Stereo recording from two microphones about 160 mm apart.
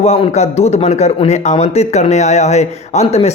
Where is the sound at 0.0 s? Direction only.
40° left (ahead or behind).